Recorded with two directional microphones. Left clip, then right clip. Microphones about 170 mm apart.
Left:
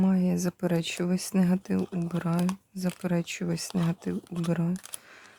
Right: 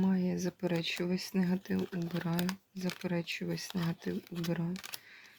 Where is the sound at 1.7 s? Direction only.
15° left (ahead or behind).